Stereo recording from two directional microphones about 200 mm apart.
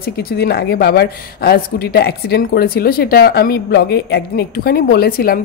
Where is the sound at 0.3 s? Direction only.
50° left (ahead or behind).